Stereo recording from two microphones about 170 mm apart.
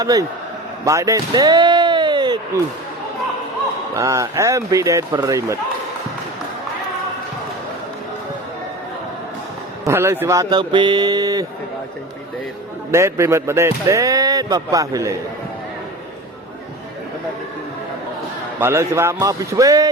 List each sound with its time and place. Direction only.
0.0 s speech: 20° right (ahead or behind)
0.9 s slam: 20° right (ahead or behind)
3.9 s speech: 20° right (ahead or behind)
9.8 s speech: 15° right (ahead or behind)
12.9 s speech: 15° right (ahead or behind)
18.6 s speech: 15° right (ahead or behind)